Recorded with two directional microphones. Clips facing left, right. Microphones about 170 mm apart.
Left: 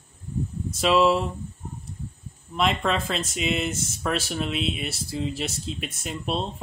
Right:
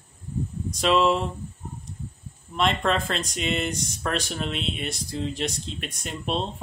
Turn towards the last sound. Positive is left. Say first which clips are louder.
# even
turn(degrees=5)  # may be behind; listen again after turning